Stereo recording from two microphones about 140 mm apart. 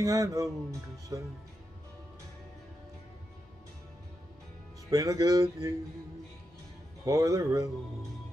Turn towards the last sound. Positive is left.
turn(degrees=-25)  # may be behind; listen again after turning